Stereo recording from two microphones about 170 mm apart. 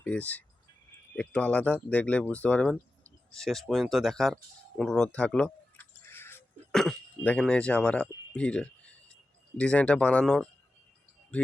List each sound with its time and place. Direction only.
0.0 s speech: 10° left (ahead or behind)
4.8 s chewing: 5° left (ahead or behind)
6.7 s speech: 5° left (ahead or behind)